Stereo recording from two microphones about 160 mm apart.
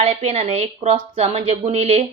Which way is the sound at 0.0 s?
40° right (ahead or behind).